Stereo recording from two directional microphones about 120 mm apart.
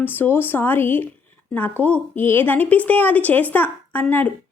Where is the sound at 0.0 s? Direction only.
15° left (ahead or behind).